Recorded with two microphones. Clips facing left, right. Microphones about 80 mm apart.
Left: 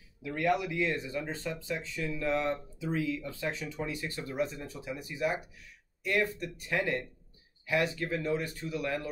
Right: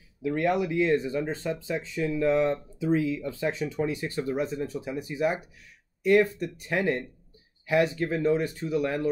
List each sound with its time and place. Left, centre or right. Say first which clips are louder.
0.2 s speech: right 4 dB; right